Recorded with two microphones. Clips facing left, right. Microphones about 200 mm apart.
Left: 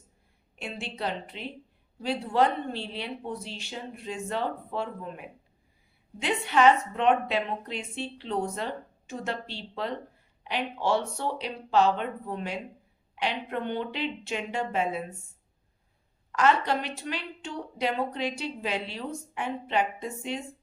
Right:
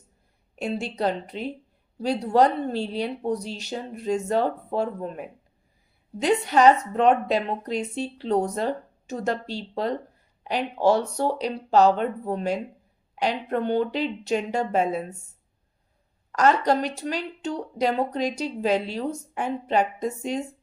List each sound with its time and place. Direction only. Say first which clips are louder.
0.5 s speech: right 9 dB; 40° right (ahead or behind)
16.3 s speech: right 4 dB; 40° right (ahead or behind)